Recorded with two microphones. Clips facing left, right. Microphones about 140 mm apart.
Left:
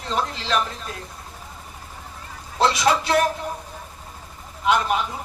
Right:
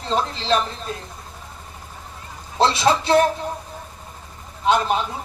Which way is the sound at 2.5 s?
30° right (ahead or behind).